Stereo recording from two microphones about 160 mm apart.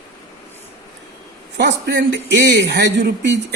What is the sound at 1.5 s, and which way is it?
A woman's voice, 90° right.